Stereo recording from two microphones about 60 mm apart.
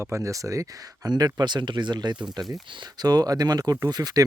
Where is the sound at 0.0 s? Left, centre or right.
Right.